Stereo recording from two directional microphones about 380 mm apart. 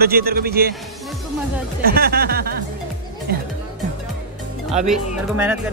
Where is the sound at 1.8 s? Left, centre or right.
Right.